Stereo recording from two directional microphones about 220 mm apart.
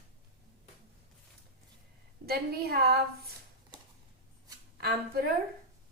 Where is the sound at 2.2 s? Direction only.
45° right (ahead or behind).